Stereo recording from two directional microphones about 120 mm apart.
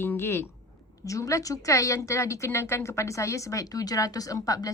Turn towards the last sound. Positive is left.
turn(degrees=30)  # may be behind; listen again after turning